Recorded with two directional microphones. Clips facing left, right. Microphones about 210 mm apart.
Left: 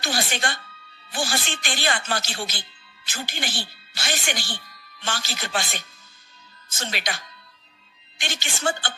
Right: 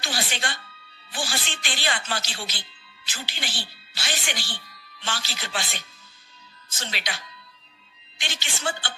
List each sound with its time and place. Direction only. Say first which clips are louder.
0.0 s speech: left 4 dB; 45° left (ahead or behind)
8.2 s speech: left 4 dB; 45° left (ahead or behind)